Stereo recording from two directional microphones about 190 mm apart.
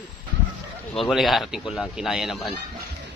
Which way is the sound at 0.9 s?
Centre (ahead or behind).